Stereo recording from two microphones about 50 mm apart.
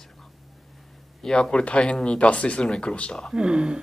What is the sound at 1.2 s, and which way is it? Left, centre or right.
Speech, centre.